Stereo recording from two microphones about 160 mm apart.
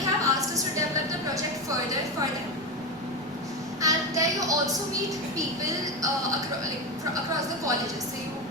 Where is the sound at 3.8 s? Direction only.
20° right (ahead or behind).